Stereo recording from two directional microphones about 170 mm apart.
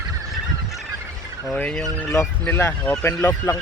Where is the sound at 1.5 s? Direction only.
5° left (ahead or behind).